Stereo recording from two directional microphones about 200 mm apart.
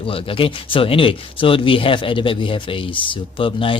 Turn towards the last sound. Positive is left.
turn(degrees=25)  # may be behind; listen again after turning